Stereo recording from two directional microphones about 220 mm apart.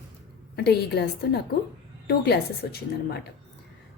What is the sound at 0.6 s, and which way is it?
A woman's voice, 45° left (ahead or behind).